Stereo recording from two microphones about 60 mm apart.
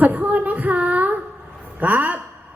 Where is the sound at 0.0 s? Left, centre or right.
Right.